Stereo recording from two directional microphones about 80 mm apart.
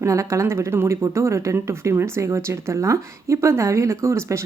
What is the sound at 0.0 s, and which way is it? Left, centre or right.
Speech, right.